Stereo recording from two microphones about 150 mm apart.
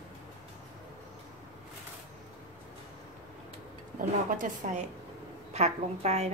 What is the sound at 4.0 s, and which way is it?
Speech, 65° right (ahead or behind).